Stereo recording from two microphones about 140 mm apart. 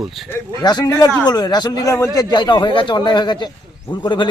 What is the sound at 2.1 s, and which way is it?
Speech, 35° left (ahead or behind).